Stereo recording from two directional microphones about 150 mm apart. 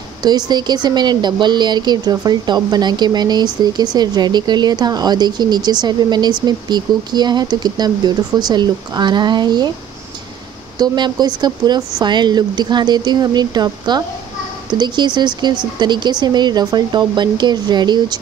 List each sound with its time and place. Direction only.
0.5 s speech: 30° right (ahead or behind)
10.8 s speech: 30° right (ahead or behind)